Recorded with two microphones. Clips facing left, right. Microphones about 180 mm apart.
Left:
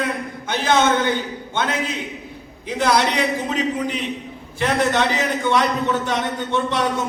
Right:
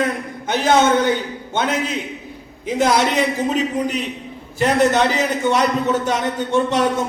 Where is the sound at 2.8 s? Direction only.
45° right (ahead or behind).